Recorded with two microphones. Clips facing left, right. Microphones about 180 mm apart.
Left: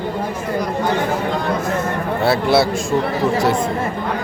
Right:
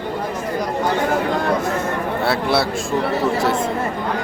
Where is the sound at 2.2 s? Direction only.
Centre (ahead or behind).